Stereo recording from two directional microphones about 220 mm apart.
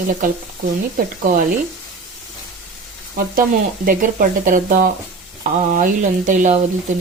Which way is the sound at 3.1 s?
40° right (ahead or behind).